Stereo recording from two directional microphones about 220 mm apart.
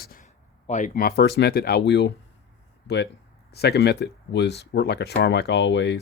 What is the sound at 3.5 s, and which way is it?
Speech, 50° left (ahead or behind).